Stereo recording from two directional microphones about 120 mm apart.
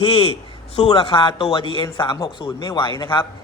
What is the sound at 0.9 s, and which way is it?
A man's voice, 50° left (ahead or behind).